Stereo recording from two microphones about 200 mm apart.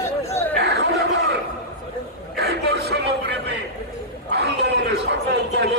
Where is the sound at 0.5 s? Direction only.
60° right (ahead or behind).